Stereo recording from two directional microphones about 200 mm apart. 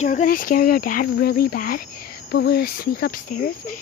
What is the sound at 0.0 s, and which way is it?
Speech, 40° left (ahead or behind).